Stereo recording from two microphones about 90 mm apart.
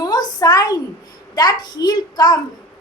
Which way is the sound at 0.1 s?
50° left (ahead or behind).